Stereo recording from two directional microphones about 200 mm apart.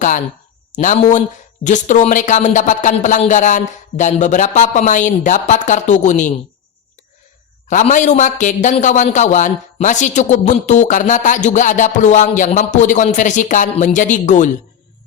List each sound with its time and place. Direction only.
1.6 s a man's voice: 40° left (ahead or behind)
7.7 s a man's voice: 40° left (ahead or behind)